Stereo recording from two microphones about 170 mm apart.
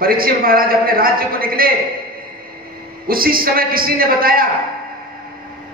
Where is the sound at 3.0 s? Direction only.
60° right (ahead or behind).